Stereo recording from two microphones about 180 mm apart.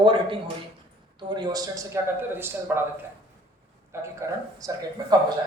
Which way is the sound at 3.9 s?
15° right (ahead or behind).